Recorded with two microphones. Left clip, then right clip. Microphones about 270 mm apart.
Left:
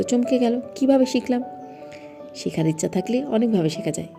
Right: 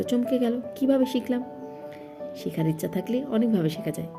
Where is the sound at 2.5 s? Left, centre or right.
Centre.